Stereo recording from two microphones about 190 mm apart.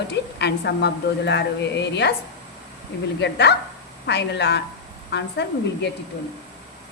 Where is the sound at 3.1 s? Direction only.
65° left (ahead or behind).